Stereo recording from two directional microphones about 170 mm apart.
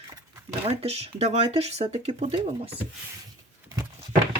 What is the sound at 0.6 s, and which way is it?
Speech, 35° right (ahead or behind).